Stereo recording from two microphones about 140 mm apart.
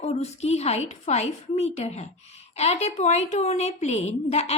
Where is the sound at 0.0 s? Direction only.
50° left (ahead or behind).